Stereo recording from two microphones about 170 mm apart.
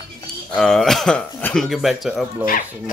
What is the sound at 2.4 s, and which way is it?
Speech, 55° left (ahead or behind).